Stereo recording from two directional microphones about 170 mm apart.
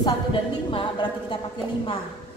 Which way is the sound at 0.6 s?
30° left (ahead or behind).